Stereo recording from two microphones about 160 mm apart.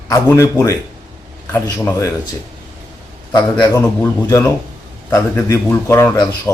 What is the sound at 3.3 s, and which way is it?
A man's voice, 25° left (ahead or behind).